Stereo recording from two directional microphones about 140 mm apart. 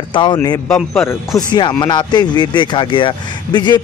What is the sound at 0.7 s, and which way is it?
Speech, 5° left (ahead or behind).